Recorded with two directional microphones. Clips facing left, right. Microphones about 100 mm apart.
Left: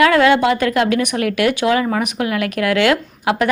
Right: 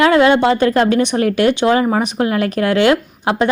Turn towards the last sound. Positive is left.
turn(degrees=-25)  # may be behind; listen again after turning